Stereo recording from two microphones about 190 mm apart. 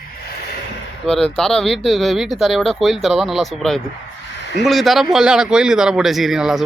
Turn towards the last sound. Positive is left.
turn(degrees=0)  # may be behind; listen again after turning